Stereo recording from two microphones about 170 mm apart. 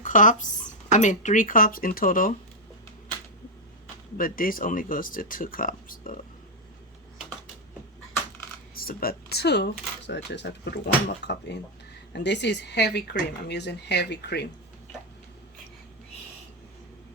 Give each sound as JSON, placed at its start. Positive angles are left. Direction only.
{"t": 0.0, "sound": "speech", "side_deg": 50}
{"t": 4.2, "sound": "speech", "side_deg": 55}
{"t": 8.7, "sound": "speech", "side_deg": 60}